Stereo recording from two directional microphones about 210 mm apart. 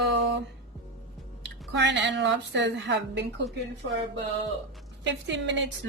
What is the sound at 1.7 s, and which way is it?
Speech, 55° right (ahead or behind).